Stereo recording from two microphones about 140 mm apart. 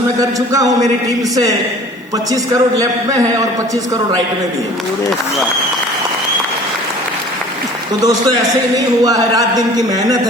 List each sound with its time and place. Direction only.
0.2 s speech: 25° right (ahead or behind)
2.3 s speech: 25° right (ahead or behind)
8.0 s speech: 25° right (ahead or behind)